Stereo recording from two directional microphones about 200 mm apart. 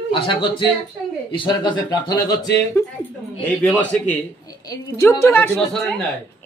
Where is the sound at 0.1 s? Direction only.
25° left (ahead or behind); by 5.9 s centre (ahead or behind).